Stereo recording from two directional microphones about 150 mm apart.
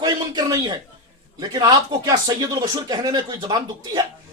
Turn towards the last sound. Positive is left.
turn(degrees=-25)  # may be behind; listen again after turning